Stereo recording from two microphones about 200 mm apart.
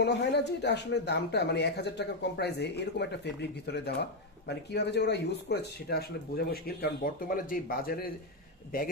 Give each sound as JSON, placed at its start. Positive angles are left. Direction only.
{"t": 0.0, "sound": "speech", "side_deg": 60}